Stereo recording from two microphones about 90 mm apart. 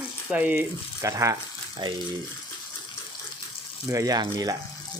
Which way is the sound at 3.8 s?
40° right (ahead or behind).